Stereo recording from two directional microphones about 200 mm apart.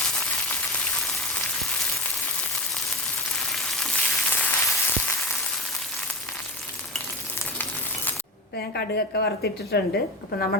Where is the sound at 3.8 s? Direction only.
10° left (ahead or behind).